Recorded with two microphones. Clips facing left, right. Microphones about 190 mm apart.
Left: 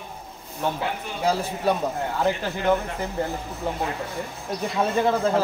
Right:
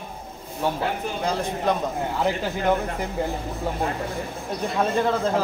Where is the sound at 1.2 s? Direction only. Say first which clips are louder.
Left 2 dB; 5° left (ahead or behind).